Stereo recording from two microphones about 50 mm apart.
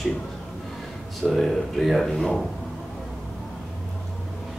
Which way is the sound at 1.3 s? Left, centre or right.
Centre.